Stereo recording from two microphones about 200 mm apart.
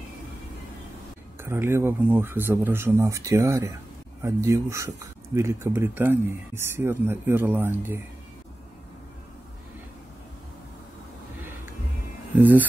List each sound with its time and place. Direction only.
1.4 s speech: 10° right (ahead or behind)
12.4 s speech: 10° right (ahead or behind)